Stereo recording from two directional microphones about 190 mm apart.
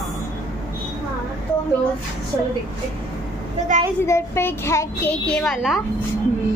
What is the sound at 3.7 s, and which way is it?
Speech, 45° right (ahead or behind).